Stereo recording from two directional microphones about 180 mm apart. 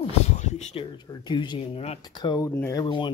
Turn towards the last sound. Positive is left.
turn(degrees=25)  # may be behind; listen again after turning